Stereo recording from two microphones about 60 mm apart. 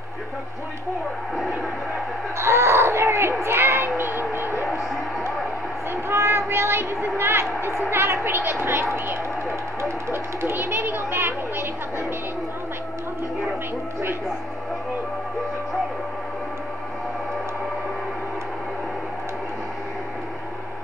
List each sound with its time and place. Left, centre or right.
1.3 s speech: centre
2.3 s a sound: right
3.4 s speech: right
5.9 s a child's voice: right